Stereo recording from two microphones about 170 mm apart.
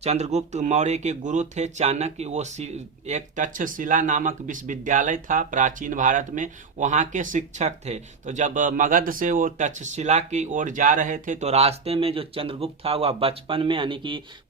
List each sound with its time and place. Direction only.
0.0 s speech: 40° right (ahead or behind)